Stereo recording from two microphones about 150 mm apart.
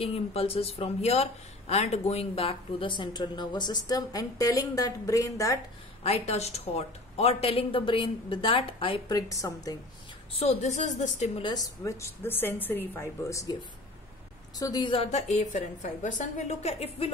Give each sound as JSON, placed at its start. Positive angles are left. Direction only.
{"t": 0.0, "sound": "speech", "side_deg": 40}
{"t": 6.0, "sound": "speech", "side_deg": 45}
{"t": 9.1, "sound": "a woman's voice", "side_deg": 25}
{"t": 10.4, "sound": "a woman's voice", "side_deg": 50}
{"t": 11.4, "sound": "speech", "side_deg": 25}
{"t": 14.6, "sound": "a woman's voice", "side_deg": 30}
{"t": 15.0, "sound": "a woman's voice", "side_deg": 50}